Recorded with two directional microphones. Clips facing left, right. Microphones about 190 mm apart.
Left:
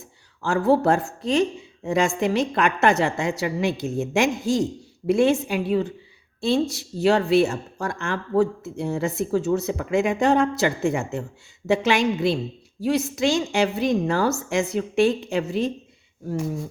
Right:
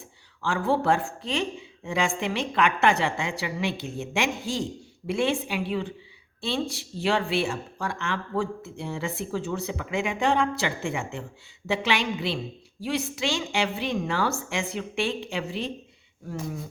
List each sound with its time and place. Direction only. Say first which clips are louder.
0.4 s speech: left 5 dB; 40° left (ahead or behind)